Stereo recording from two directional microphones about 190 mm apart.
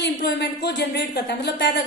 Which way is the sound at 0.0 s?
65° left (ahead or behind).